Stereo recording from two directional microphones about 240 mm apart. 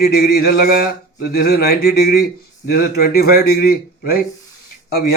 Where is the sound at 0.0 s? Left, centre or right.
Left.